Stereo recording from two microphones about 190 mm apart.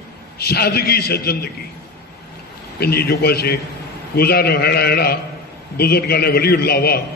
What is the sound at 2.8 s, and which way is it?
A man's voice, 55° left (ahead or behind).